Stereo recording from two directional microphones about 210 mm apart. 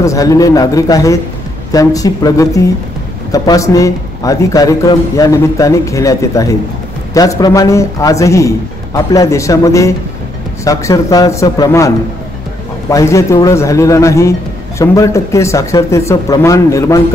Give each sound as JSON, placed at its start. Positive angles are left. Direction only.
{"t": 0.0, "sound": "speech", "side_deg": 15}
{"t": 12.9, "sound": "speech", "side_deg": 15}